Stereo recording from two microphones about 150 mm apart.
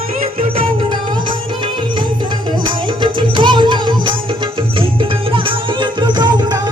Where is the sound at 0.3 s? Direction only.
40° right (ahead or behind).